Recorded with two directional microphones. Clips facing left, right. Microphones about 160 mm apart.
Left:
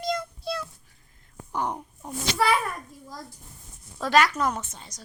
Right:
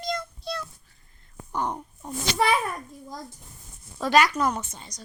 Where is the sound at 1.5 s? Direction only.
10° left (ahead or behind).